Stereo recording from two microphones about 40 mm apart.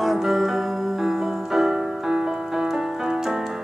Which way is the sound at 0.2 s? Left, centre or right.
Centre.